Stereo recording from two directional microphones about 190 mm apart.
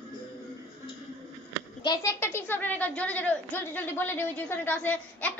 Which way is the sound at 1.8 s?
20° left (ahead or behind).